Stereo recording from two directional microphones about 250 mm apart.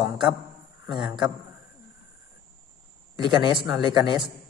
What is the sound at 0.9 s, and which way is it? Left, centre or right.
Speech, centre.